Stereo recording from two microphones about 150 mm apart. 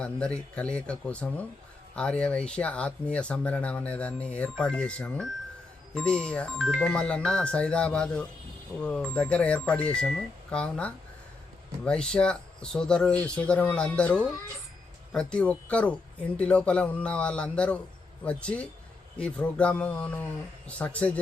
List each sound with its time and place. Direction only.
0.0 s speech: 5° left (ahead or behind)